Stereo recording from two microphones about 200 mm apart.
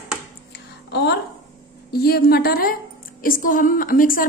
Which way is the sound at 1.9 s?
50° left (ahead or behind).